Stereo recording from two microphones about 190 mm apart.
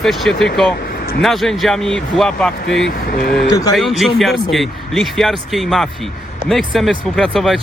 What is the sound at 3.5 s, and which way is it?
Speech, 20° left (ahead or behind).